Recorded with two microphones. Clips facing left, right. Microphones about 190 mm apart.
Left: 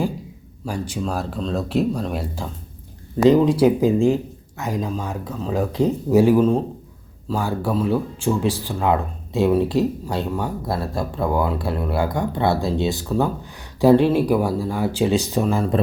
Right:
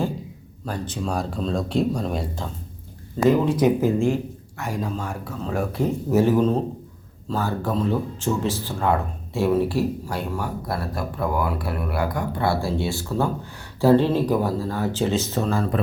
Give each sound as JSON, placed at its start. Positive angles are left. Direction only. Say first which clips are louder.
{"t": 0.6, "sound": "speech", "louder": "left 2 dB", "side_deg": 10}